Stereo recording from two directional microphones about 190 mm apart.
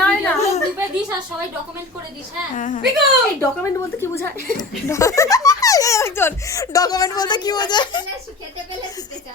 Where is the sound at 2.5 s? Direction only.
40° left (ahead or behind).